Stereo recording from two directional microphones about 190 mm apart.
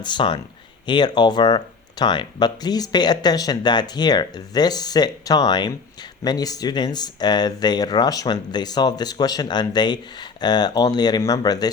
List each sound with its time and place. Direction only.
0.0 s speech: 25° left (ahead or behind)